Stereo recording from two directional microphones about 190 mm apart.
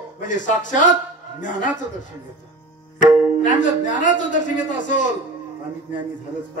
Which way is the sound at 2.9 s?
40° left (ahead or behind).